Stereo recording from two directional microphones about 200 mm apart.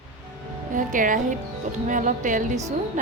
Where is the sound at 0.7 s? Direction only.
40° right (ahead or behind).